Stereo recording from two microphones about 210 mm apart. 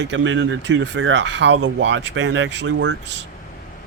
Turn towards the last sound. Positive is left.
turn(degrees=-55)  # may be behind; listen again after turning